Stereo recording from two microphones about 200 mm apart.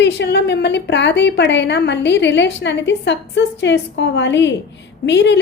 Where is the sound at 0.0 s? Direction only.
60° left (ahead or behind).